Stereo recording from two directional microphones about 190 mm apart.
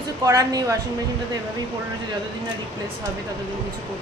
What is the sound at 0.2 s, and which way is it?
Speech, 15° right (ahead or behind).